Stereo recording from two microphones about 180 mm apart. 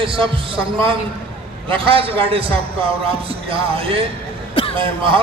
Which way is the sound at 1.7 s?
30° right (ahead or behind).